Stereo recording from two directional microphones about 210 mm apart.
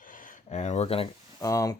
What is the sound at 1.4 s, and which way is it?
Speech, 15° left (ahead or behind).